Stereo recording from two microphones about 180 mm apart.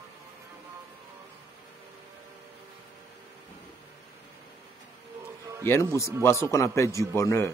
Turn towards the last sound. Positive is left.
turn(degrees=15)  # may be behind; listen again after turning